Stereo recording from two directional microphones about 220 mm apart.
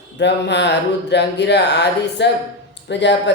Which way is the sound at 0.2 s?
50° left (ahead or behind).